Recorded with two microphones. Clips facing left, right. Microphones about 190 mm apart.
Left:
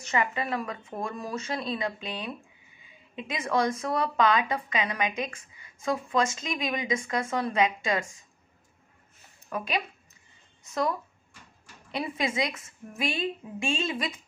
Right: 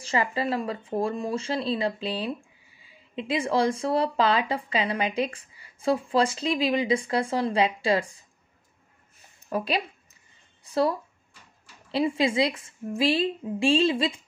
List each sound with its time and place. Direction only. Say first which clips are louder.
0.0 s speech: right 3 dB; 30° right (ahead or behind)
9.5 s speech: right 4 dB; 35° right (ahead or behind)